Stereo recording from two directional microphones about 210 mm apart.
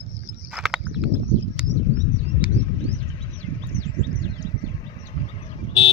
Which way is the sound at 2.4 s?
5° right (ahead or behind).